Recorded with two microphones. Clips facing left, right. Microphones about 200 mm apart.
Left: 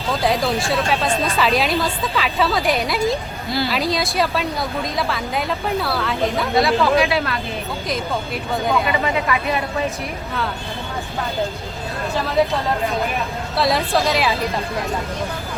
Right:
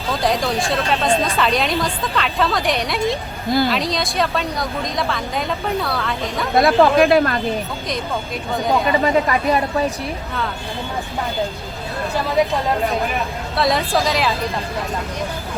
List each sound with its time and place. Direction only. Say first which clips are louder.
0.2 s a woman's voice: even; 5° left (ahead or behind)
6.6 s speech: right 4 dB; 50° right (ahead or behind)
8.7 s speech: right 5 dB; 40° right (ahead or behind)
13.6 s a woman's voice: even; centre (ahead or behind)